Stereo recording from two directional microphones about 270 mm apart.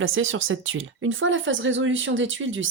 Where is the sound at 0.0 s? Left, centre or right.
Right.